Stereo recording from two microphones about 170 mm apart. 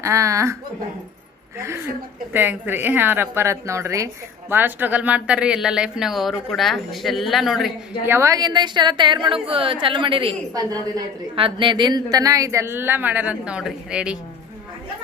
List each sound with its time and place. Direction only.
0.0 s a woman's voice: 15° right (ahead or behind)
1.5 s a woman's voice: 15° right (ahead or behind); by 7.7 s centre (ahead or behind)
8.0 s a woman's voice: 15° right (ahead or behind)